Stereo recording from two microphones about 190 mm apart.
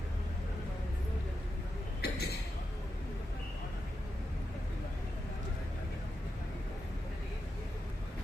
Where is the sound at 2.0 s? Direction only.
55° left (ahead or behind).